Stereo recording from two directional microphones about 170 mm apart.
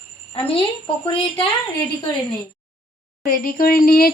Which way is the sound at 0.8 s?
30° left (ahead or behind).